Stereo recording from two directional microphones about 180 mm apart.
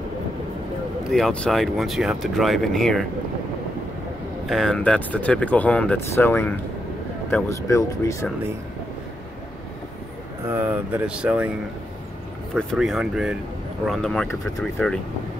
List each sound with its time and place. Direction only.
1.1 s speech: 5° left (ahead or behind)
4.5 s speech: centre (ahead or behind)
10.5 s speech: 10° right (ahead or behind)
12.5 s speech: centre (ahead or behind)